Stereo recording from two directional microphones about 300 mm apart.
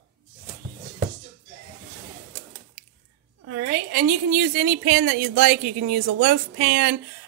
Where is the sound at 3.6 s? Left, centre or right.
Right.